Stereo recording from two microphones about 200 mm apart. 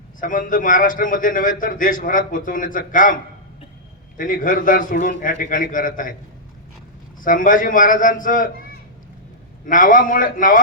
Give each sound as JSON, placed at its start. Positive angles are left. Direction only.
{"t": 0.2, "sound": "a man's voice", "side_deg": 40}
{"t": 4.2, "sound": "a man's voice", "side_deg": 45}
{"t": 7.2, "sound": "a man's voice", "side_deg": 40}
{"t": 9.6, "sound": "a man's voice", "side_deg": 40}